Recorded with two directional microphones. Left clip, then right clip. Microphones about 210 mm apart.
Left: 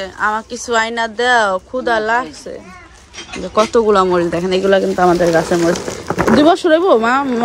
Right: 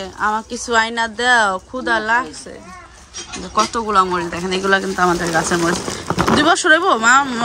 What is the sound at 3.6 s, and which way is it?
Speech, 5° right (ahead or behind).